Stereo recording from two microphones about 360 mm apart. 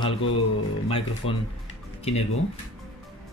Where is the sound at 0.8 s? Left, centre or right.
Centre.